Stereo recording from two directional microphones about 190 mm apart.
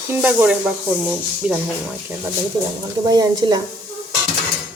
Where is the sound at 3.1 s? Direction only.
20° right (ahead or behind).